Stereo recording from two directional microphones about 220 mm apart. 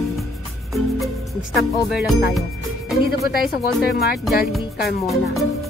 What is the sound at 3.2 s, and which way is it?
Speech, 45° left (ahead or behind).